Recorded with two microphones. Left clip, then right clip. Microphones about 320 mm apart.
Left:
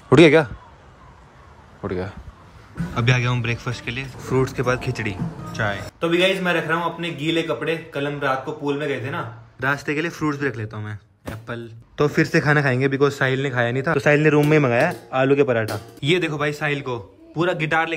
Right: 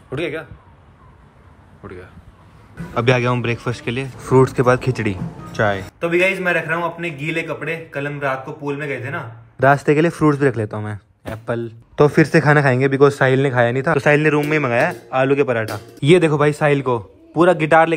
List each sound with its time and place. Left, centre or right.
0.1 s a man's voice: centre
1.8 s a man's voice: centre
2.9 s a man's voice: centre